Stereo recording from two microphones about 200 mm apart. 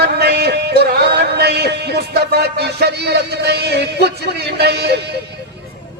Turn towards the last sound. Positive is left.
turn(degrees=-55)  # may be behind; listen again after turning